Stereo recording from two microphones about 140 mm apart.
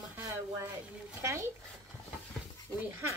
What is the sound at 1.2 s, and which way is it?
Speech, 20° right (ahead or behind).